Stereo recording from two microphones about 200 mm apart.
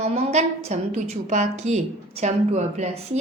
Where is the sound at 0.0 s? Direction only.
30° right (ahead or behind).